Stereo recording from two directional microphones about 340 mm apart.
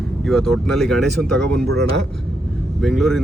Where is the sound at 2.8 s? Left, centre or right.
Centre.